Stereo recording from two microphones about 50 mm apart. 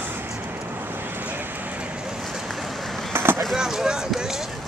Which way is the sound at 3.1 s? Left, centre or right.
Right.